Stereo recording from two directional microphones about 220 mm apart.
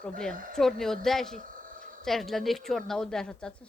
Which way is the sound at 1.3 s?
35° right (ahead or behind).